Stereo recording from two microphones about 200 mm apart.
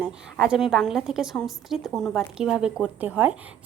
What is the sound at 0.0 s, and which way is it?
A woman's voice, 5° right (ahead or behind).